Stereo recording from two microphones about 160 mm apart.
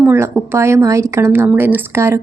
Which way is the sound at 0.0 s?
10° right (ahead or behind).